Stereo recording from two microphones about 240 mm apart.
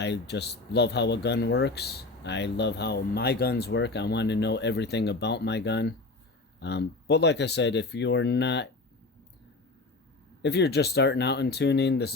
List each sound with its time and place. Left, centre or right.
0.0 s speech: left
10.4 s speech: left